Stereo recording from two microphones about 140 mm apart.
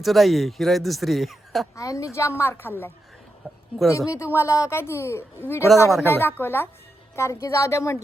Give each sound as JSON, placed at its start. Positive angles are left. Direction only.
{"t": 0.0, "sound": "speech", "side_deg": 0}
{"t": 1.7, "sound": "a woman's voice", "side_deg": 25}